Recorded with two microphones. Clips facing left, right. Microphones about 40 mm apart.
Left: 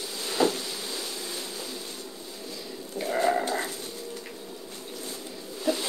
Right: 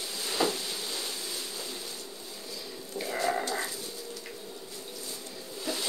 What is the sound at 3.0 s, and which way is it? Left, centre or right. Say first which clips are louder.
Sheep: left 5 dB; left.